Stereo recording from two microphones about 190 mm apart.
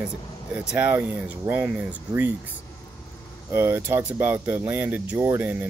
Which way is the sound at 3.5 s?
10° right (ahead or behind).